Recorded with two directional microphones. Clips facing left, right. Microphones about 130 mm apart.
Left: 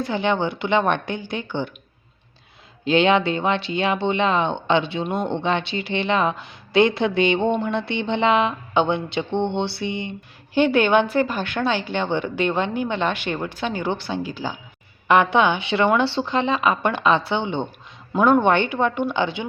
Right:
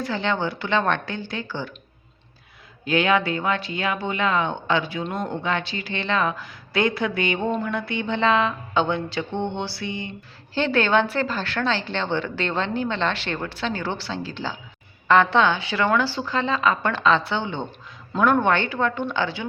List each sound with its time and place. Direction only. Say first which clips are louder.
0.1 s speech: left 3 dB; 15° left (ahead or behind)
2.8 s a woman's voice: left 3 dB; 25° left (ahead or behind)